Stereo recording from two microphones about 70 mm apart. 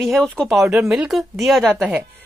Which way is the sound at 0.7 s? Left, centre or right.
Centre.